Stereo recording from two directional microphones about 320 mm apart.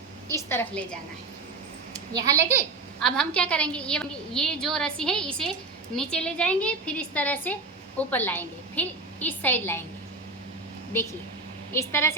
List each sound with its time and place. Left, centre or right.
0.3 s a woman's voice: centre
1.9 s a sound: centre
3.0 s a woman's voice: centre
11.7 s a woman's voice: centre